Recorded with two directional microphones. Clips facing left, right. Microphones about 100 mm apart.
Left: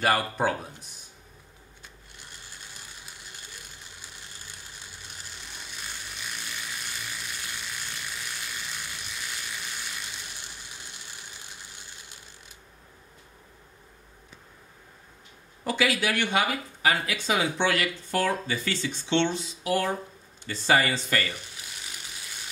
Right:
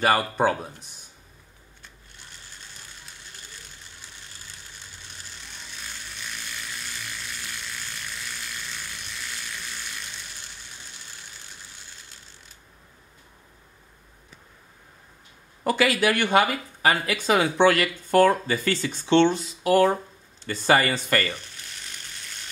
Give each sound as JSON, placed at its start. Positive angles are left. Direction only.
{"t": 0.0, "sound": "speech", "side_deg": -30}
{"t": 5.6, "sound": "a sound", "side_deg": 10}
{"t": 15.6, "sound": "speech", "side_deg": -50}
{"t": 21.5, "sound": "ratchet", "side_deg": 5}